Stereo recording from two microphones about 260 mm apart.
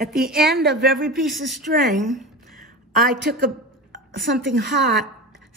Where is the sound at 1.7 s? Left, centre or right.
Right.